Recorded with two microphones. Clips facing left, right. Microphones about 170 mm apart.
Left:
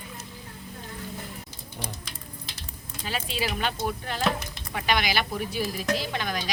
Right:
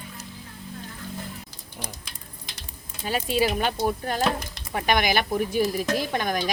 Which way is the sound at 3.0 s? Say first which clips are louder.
Right 7 dB; 45° right (ahead or behind).